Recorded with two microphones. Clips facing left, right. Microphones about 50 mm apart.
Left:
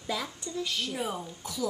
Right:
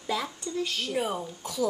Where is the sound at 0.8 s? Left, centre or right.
Centre.